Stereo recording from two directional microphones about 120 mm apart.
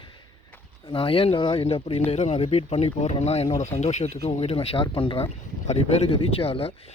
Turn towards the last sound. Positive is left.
turn(degrees=55)  # may be behind; listen again after turning